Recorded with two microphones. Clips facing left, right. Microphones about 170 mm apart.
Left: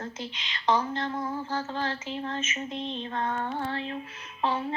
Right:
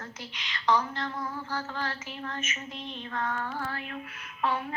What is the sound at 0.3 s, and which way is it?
Child singing, 25° left (ahead or behind).